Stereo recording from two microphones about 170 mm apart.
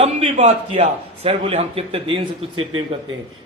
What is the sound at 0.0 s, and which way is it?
A man's voice, 45° right (ahead or behind).